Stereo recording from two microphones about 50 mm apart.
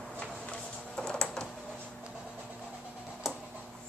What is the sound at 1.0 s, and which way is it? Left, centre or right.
Printer, centre.